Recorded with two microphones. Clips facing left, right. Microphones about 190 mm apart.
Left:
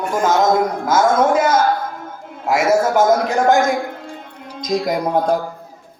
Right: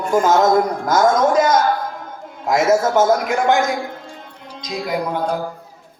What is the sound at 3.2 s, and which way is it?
Speech, 40° left (ahead or behind).